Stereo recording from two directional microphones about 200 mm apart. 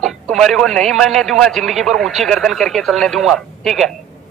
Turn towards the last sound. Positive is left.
turn(degrees=0)  # may be behind; listen again after turning